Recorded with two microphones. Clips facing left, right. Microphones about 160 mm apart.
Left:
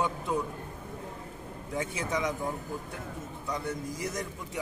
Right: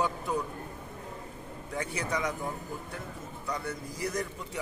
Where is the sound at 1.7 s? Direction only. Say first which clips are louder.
Left 1 dB; 20° left (ahead or behind).